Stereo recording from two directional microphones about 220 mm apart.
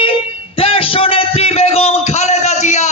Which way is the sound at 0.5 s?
25° left (ahead or behind).